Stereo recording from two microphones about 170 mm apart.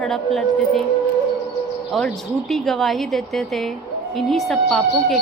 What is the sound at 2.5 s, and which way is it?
A woman's voice, centre (ahead or behind).